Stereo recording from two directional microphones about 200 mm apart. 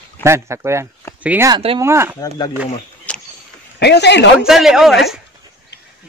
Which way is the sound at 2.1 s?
20° left (ahead or behind).